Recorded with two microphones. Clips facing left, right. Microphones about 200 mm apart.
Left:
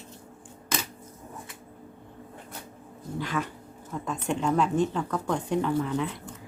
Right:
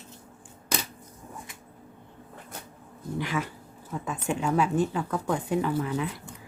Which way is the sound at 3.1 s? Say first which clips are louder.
Even; 10° right (ahead or behind).